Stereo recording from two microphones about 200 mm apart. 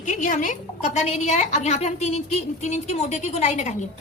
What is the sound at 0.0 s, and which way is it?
A woman's voice, 40° left (ahead or behind).